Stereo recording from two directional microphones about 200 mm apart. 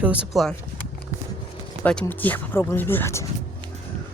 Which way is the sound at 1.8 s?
5° left (ahead or behind).